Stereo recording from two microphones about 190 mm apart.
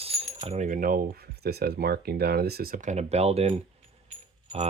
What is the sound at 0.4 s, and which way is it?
Speech, 35° right (ahead or behind).